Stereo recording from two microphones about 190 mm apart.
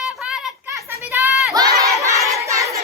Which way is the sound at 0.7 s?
15° right (ahead or behind).